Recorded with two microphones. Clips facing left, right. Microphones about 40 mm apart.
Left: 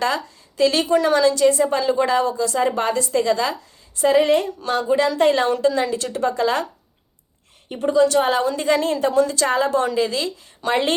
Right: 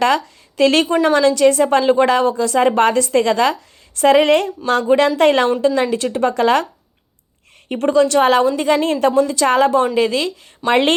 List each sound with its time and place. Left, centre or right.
0.0 s a woman's voice: right
3.5 s a woman's voice: right
5.6 s a woman's voice: right
6.3 s a woman's voice: right
7.7 s a woman's voice: right
8.4 s a woman's voice: right
9.5 s a woman's voice: right
9.7 s a woman's voice: right